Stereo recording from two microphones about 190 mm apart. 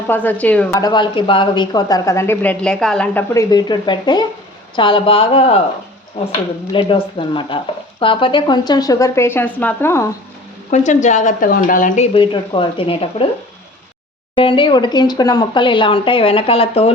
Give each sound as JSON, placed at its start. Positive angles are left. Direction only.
{"t": 0.1, "sound": "a woman's voice", "side_deg": 10}
{"t": 0.7, "sound": "a woman's voice", "side_deg": 20}
{"t": 3.3, "sound": "speech", "side_deg": 20}
{"t": 6.7, "sound": "speech", "side_deg": 25}
{"t": 10.7, "sound": "speech", "side_deg": 40}
{"t": 12.1, "sound": "speech", "side_deg": 25}
{"t": 14.3, "sound": "speech", "side_deg": 25}